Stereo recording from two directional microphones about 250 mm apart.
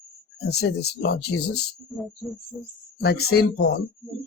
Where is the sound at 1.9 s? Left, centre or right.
Centre.